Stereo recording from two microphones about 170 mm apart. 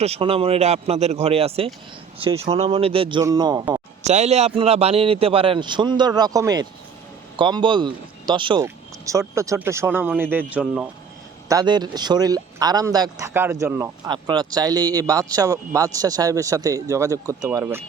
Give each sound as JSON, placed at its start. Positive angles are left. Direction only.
{"t": 0.0, "sound": "a man's voice", "side_deg": -35}
{"t": 4.0, "sound": "a man's voice", "side_deg": -40}
{"t": 8.6, "sound": "speech", "side_deg": -15}
{"t": 11.4, "sound": "speech", "side_deg": -25}
{"t": 14.1, "sound": "speech", "side_deg": -25}